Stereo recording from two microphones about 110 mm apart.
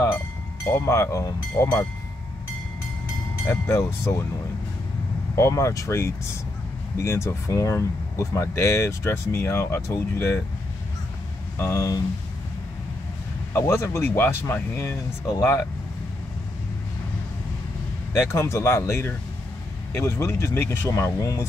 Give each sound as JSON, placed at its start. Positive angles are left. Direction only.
{"t": 0.7, "sound": "speech", "side_deg": 25}
{"t": 3.4, "sound": "speech", "side_deg": 25}
{"t": 5.3, "sound": "speech", "side_deg": 25}
{"t": 11.5, "sound": "speech", "side_deg": 25}
{"t": 13.5, "sound": "speech", "side_deg": 20}
{"t": 18.1, "sound": "speech", "side_deg": 25}